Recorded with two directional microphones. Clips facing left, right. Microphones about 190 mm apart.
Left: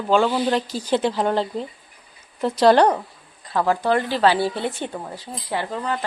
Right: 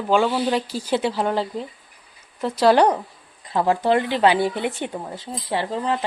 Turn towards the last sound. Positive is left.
turn(degrees=-25)  # may be behind; listen again after turning